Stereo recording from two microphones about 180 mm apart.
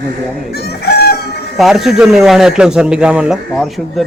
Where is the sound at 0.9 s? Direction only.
60° left (ahead or behind).